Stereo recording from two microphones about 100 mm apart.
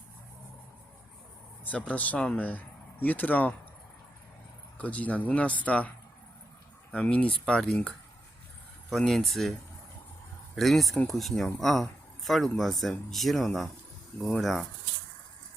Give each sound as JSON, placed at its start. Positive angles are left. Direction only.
{"t": 1.6, "sound": "speech", "side_deg": 15}
{"t": 4.8, "sound": "speech", "side_deg": 15}
{"t": 6.9, "sound": "speech", "side_deg": 15}
{"t": 8.9, "sound": "speech", "side_deg": 5}